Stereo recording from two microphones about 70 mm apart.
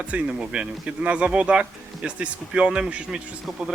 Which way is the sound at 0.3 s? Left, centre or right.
Centre.